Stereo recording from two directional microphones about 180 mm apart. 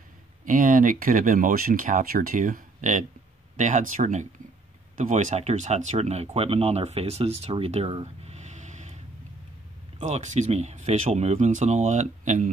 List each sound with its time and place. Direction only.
0.5 s speech: 45° right (ahead or behind)